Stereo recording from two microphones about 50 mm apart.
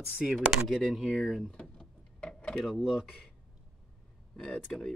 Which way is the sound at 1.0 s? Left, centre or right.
Centre.